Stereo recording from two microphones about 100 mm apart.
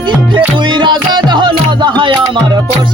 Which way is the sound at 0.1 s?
50° right (ahead or behind).